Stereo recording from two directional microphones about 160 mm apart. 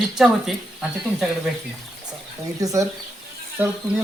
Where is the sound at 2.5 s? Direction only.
20° right (ahead or behind).